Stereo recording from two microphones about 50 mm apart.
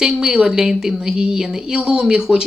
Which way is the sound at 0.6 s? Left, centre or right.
Centre.